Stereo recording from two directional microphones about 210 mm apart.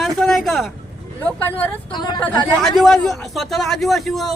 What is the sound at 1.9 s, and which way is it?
Speech, 20° left (ahead or behind).